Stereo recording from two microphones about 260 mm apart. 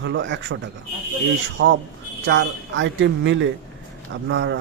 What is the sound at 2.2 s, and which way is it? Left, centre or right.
A man's voice, right.